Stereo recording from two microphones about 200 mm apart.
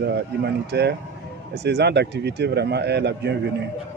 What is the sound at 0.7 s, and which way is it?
Speech, 55° right (ahead or behind).